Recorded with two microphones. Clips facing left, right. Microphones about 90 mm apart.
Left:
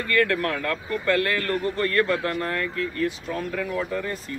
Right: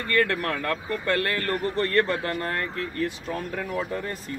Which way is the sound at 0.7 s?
35° right (ahead or behind).